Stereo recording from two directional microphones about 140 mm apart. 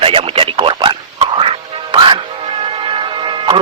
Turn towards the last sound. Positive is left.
turn(degrees=-35)  # may be behind; listen again after turning